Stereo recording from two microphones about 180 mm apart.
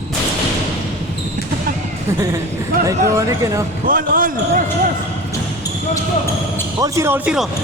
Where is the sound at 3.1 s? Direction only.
15° right (ahead or behind).